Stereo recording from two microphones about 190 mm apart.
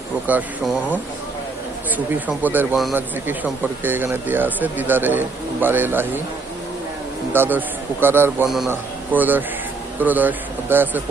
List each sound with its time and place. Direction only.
0.3 s speech: 10° right (ahead or behind)
2.0 s speech: 10° right (ahead or behind)
7.3 s a man's voice: 10° right (ahead or behind)